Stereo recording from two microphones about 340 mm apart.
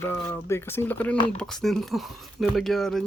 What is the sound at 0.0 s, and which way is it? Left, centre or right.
Speech, centre.